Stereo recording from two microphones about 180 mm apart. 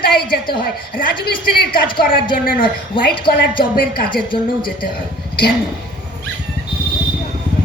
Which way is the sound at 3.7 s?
55° left (ahead or behind).